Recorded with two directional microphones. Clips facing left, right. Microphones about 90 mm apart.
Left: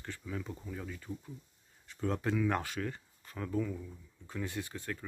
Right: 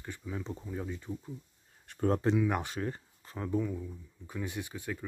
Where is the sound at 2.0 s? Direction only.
40° right (ahead or behind).